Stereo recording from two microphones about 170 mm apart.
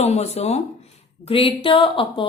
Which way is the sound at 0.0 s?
40° left (ahead or behind).